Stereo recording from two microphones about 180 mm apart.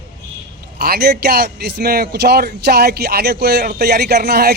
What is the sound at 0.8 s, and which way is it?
A man's voice, 60° right (ahead or behind).